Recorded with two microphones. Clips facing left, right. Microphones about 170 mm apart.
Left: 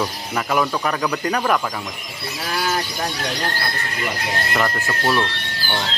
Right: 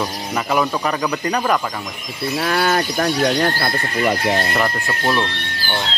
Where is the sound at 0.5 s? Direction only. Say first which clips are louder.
Right 1 dB; 5° right (ahead or behind).